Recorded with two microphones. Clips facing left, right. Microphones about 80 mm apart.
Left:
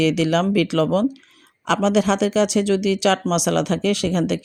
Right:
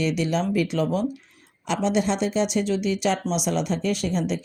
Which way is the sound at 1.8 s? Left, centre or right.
Left.